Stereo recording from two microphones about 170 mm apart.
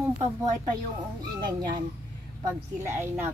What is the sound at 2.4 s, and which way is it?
Speech, 15° right (ahead or behind).